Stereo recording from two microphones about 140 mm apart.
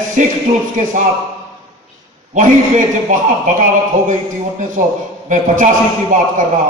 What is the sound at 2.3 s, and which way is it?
A man's voice, 65° right (ahead or behind).